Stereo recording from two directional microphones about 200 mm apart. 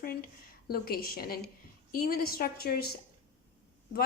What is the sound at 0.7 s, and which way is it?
A woman's voice, 50° left (ahead or behind).